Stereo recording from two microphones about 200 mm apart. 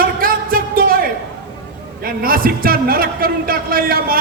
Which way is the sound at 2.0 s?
45° right (ahead or behind).